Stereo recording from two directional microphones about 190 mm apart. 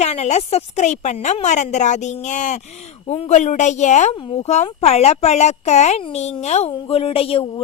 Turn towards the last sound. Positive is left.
turn(degrees=30)  # may be behind; listen again after turning